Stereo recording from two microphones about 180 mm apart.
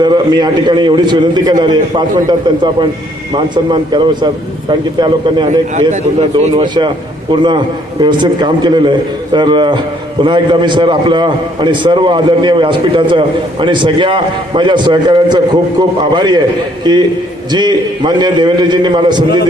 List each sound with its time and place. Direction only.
0.0 s a man's voice: 25° right (ahead or behind)
3.3 s a man's voice: 25° right (ahead or behind)
5.5 s a man's voice: 40° right (ahead or behind)
6.7 s a man's voice: 25° right (ahead or behind)